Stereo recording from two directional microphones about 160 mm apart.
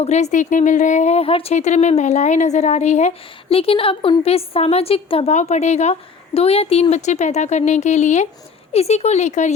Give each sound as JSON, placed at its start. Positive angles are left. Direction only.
{"t": 0.0, "sound": "a woman's voice", "side_deg": 45}